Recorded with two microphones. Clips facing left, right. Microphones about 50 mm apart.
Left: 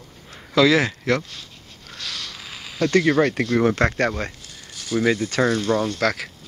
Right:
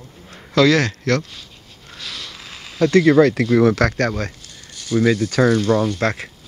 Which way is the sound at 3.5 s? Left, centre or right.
Centre.